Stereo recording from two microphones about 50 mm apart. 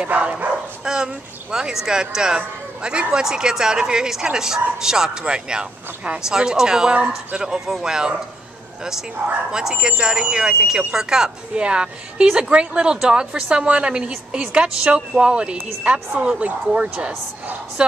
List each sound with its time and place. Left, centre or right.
0.0 s a woman's voice: right
0.8 s speech: centre
6.9 s a woman's voice: right
7.4 s speech: centre
9.5 s a woman's voice: centre